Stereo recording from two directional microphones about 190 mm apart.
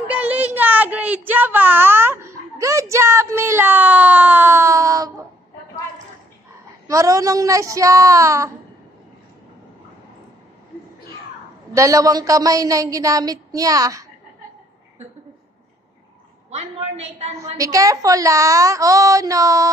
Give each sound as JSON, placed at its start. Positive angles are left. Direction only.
{"t": 0.1, "sound": "child singing", "side_deg": -10}
{"t": 6.9, "sound": "a woman's voice", "side_deg": -15}
{"t": 11.7, "sound": "a woman's voice", "side_deg": -15}
{"t": 16.4, "sound": "a woman's voice", "side_deg": -35}
{"t": 17.6, "sound": "a woman's voice", "side_deg": -15}